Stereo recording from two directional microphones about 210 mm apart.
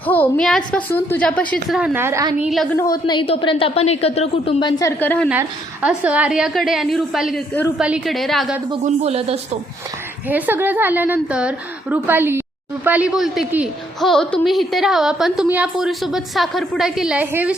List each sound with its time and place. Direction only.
0.0 s a woman's voice: 10° left (ahead or behind)
1.7 s a woman's voice: 5° right (ahead or behind)
2.7 s a woman's voice: 15° left (ahead or behind)
5.3 s a woman's voice: 5° right (ahead or behind)
8.8 s speech: 30° right (ahead or behind)
10.2 s a woman's voice: 10° right (ahead or behind)